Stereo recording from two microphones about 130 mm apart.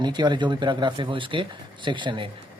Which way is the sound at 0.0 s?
35° right (ahead or behind).